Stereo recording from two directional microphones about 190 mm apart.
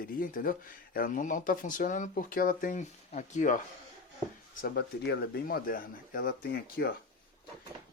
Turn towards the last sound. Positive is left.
turn(degrees=55)  # may be behind; listen again after turning